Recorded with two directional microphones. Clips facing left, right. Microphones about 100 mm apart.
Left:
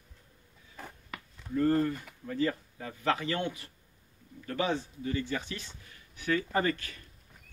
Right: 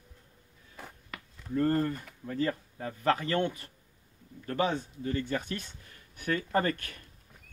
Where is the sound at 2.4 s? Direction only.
40° right (ahead or behind).